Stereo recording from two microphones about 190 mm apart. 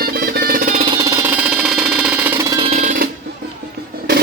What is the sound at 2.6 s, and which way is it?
Alarm clock, 35° right (ahead or behind).